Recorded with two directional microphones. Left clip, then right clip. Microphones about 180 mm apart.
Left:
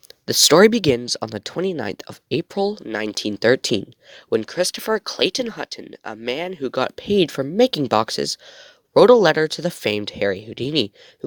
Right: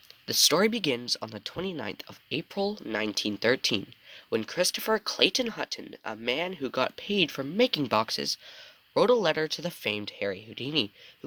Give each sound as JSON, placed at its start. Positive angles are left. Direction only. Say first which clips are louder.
{"t": 0.3, "sound": "speech", "louder": "left 11 dB", "side_deg": 45}